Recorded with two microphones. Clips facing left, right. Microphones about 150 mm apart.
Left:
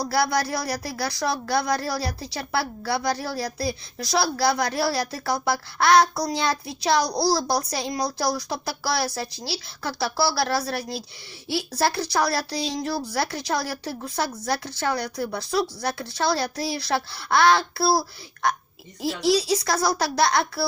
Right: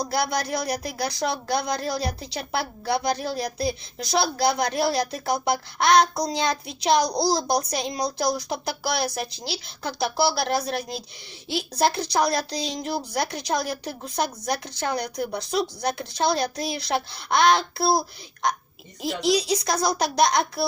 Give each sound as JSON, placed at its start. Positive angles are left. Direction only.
{"t": 0.0, "sound": "speech", "side_deg": -20}